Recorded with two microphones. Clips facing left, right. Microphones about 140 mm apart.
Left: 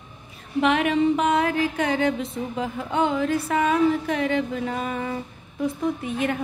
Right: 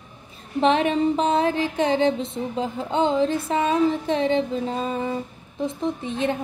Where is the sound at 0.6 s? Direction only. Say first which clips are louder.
Right 1 dB; 30° right (ahead or behind).